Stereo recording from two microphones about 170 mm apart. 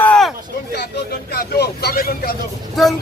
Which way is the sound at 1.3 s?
70° left (ahead or behind).